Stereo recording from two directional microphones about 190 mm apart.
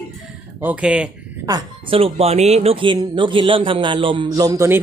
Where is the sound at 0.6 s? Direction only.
5° right (ahead or behind).